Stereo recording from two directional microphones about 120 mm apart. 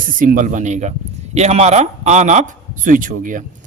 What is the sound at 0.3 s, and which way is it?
A man's voice, 90° right.